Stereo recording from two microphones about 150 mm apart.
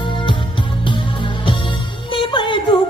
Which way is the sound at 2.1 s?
35° left (ahead or behind).